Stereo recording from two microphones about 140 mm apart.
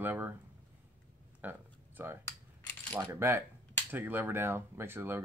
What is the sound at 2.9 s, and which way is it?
Speech, 15° right (ahead or behind).